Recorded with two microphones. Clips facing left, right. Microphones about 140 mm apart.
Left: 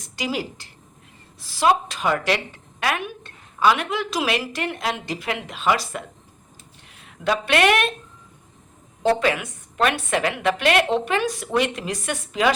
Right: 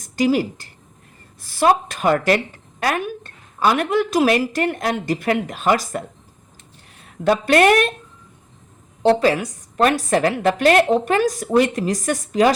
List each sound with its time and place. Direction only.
0.0 s a woman's voice: 45° right (ahead or behind)
9.1 s a woman's voice: 35° right (ahead or behind)